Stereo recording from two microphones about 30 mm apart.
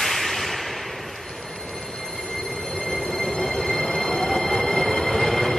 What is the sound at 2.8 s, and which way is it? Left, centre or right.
Train, left.